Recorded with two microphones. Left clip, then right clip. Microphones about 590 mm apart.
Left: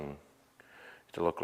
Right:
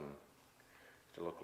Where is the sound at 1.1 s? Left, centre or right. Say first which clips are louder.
Left 14 dB; left.